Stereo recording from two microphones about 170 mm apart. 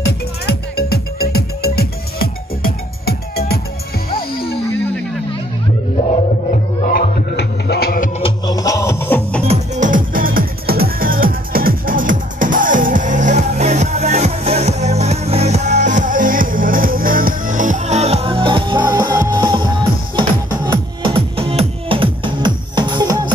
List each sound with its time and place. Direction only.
0.0 s music: 70° left (ahead or behind)
6.5 s music: 60° left (ahead or behind)
8.2 s music: 20° left (ahead or behind)
9.5 s music: 50° right (ahead or behind); by 23.3 s 25° right (ahead or behind)